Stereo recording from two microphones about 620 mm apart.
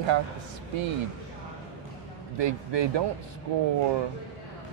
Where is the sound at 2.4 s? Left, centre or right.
Right.